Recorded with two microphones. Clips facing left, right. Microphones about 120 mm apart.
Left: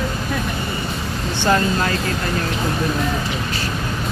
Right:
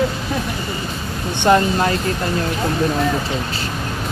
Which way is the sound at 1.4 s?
20° right (ahead or behind).